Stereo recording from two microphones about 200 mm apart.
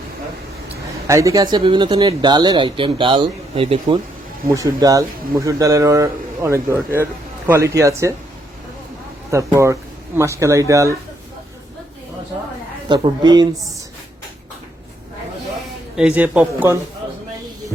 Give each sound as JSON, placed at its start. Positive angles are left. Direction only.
{"t": 1.0, "sound": "speech", "side_deg": -15}
{"t": 9.3, "sound": "speech", "side_deg": -15}
{"t": 12.9, "sound": "speech", "side_deg": -20}
{"t": 16.0, "sound": "speech", "side_deg": -5}